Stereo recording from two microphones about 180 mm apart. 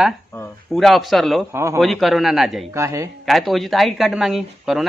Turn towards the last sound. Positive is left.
turn(degrees=0)  # may be behind; listen again after turning